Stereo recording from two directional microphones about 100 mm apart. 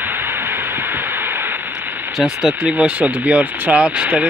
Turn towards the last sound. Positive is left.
turn(degrees=-10)  # may be behind; listen again after turning